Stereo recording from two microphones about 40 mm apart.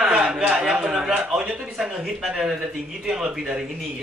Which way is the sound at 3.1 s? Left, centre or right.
Centre.